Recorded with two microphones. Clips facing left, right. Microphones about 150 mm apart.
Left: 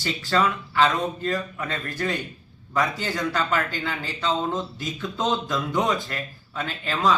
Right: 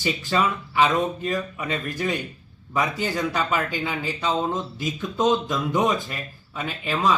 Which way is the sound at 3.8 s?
15° right (ahead or behind).